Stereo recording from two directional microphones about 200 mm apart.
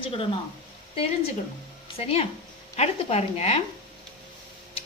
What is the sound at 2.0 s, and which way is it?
A woman's voice, 30° left (ahead or behind).